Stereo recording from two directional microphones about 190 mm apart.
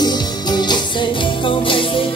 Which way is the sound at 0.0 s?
20° left (ahead or behind).